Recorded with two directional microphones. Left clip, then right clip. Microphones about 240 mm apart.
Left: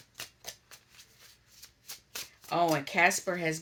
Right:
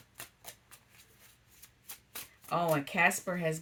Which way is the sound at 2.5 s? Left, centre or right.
Centre.